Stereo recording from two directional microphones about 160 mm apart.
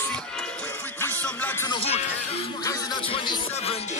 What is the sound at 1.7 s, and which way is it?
Speech, 40° left (ahead or behind).